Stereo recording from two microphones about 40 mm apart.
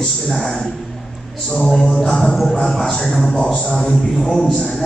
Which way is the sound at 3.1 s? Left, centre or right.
Left.